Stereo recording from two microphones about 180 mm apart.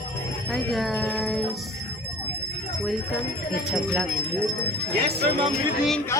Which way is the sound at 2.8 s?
Centre (ahead or behind).